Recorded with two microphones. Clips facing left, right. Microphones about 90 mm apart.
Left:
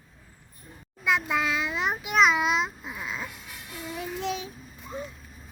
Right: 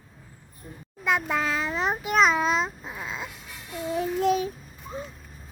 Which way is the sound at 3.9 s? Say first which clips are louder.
Right 8 dB; 40° right (ahead or behind).